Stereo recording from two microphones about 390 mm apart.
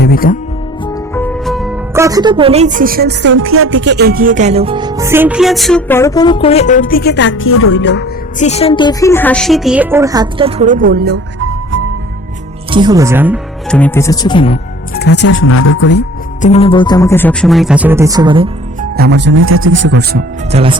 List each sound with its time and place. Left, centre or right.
0.0 s music: left
1.1 s speech: centre; by 11.8 s right
12.7 s speech: centre
18.9 s speech: right